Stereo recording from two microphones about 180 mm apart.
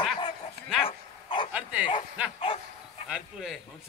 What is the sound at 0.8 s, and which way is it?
Dog, 30° left (ahead or behind).